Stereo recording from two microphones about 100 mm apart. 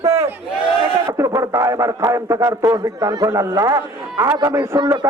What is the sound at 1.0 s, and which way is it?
A man's voice, 30° right (ahead or behind).